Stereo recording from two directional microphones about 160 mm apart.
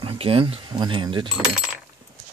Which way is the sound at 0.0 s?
35° right (ahead or behind).